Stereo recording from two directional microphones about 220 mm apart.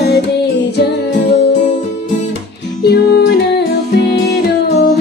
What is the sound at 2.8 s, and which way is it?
Music, 45° left (ahead or behind).